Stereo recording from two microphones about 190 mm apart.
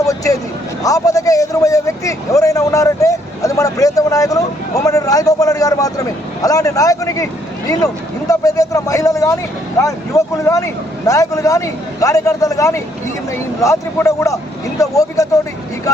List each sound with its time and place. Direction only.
0.0 s a sound: 15° left (ahead or behind)
0.8 s a man's voice: 20° left (ahead or behind)
8.3 s a man's voice: 20° left (ahead or behind)